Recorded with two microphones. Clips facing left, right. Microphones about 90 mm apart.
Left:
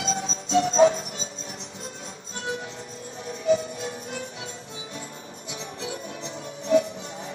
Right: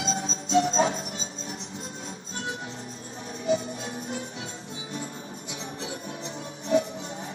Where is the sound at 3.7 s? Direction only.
30° right (ahead or behind).